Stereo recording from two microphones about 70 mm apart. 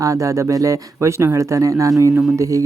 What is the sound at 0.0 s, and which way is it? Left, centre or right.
Speech, right.